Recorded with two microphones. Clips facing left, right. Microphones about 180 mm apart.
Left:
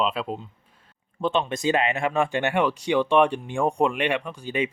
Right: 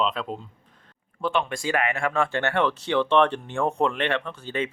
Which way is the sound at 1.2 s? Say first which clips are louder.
Left 2 dB; 20° left (ahead or behind).